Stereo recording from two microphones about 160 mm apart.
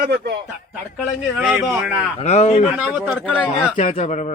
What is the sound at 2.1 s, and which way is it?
Speech, 45° left (ahead or behind).